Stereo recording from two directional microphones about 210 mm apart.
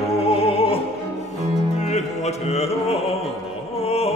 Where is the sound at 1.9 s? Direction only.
30° left (ahead or behind).